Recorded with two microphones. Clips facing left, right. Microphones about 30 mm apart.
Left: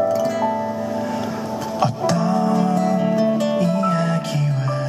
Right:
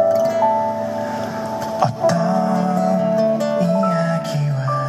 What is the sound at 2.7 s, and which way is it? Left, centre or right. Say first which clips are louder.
Music: right 1 dB; left.